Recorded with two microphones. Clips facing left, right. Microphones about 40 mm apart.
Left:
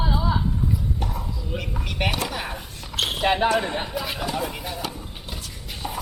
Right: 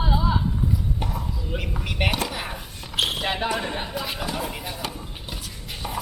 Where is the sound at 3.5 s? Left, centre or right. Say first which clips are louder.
Left 3 dB; centre.